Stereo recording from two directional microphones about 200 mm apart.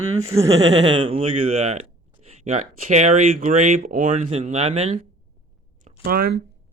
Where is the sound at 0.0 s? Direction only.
90° right.